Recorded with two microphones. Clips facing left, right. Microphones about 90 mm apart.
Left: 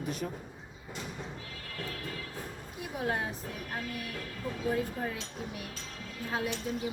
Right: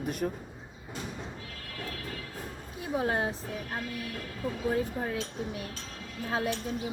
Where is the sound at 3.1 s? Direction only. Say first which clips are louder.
Right 1 dB; 30° right (ahead or behind).